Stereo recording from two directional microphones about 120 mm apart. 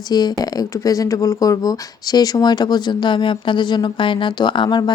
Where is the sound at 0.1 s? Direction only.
35° left (ahead or behind).